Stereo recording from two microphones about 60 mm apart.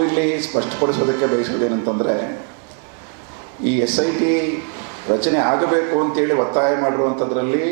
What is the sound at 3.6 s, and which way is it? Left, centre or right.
A man's voice, centre.